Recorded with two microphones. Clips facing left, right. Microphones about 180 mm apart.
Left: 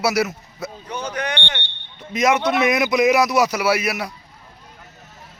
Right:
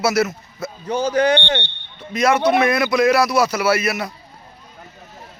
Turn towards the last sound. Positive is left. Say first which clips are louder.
# right 2 dB
turn(degrees=15)  # may be behind; listen again after turning